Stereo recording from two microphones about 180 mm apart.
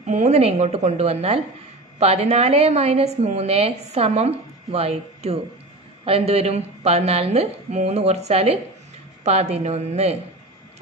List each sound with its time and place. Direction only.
0.0 s a woman's voice: 40° right (ahead or behind)